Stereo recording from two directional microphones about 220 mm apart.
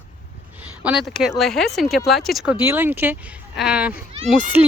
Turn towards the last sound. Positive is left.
turn(degrees=-5)  # may be behind; listen again after turning